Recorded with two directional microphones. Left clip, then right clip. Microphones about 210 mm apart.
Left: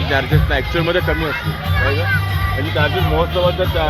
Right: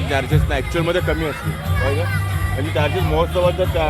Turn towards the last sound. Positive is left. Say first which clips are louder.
# left 1 dB
turn(degrees=-5)  # may be behind; listen again after turning